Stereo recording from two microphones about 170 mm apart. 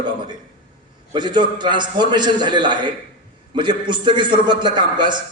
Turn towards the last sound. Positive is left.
turn(degrees=-25)  # may be behind; listen again after turning